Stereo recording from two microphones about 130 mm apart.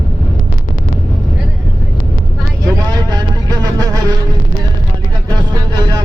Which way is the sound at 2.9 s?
30° right (ahead or behind).